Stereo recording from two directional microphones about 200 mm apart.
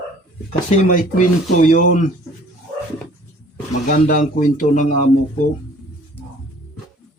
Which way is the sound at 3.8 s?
45° left (ahead or behind).